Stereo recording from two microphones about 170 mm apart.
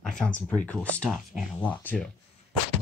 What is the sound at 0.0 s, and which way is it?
Speech, 5° left (ahead or behind).